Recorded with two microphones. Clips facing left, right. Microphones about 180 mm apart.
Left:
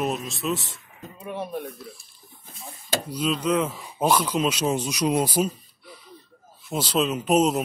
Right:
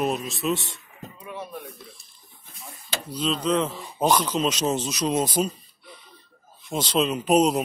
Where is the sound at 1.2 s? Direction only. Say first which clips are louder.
Left 6 dB; 50° left (ahead or behind).